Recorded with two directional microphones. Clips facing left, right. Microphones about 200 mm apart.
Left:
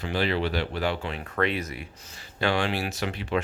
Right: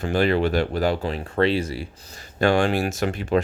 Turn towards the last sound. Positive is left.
turn(degrees=-45)  # may be behind; listen again after turning